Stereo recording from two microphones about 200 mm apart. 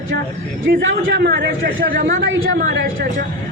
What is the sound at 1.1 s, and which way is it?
Speech, 65° right (ahead or behind).